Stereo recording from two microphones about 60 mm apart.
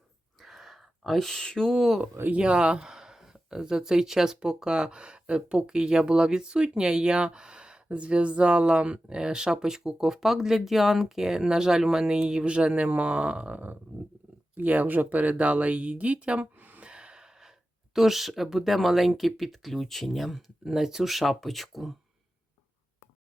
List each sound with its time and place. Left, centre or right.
0.3 s a sound: centre
2.3 s speech: centre
16.8 s gasp: centre
17.9 s speech: centre